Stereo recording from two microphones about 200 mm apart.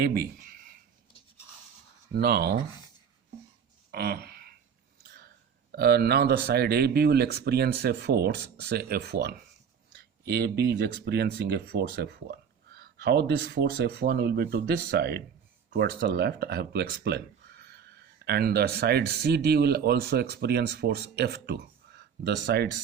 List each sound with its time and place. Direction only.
0.0 s speech: 50° right (ahead or behind)
2.1 s speech: 50° right (ahead or behind)
3.9 s a sound: 55° right (ahead or behind)
5.7 s speech: 50° right (ahead or behind)